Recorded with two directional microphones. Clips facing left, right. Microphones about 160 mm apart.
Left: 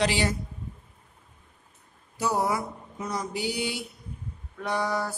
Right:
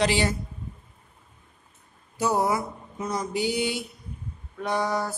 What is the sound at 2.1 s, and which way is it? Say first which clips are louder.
A woman's voice: right 2 dB; 20° right (ahead or behind).